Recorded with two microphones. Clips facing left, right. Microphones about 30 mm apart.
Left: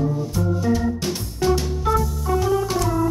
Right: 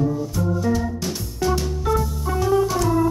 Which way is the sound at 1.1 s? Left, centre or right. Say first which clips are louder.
Left 2 dB; centre.